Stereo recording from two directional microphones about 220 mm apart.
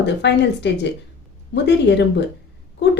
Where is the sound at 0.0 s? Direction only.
50° left (ahead or behind).